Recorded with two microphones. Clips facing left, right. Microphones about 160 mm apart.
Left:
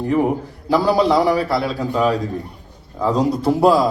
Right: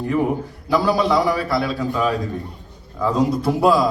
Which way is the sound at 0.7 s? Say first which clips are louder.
Left 2 dB; 30° left (ahead or behind).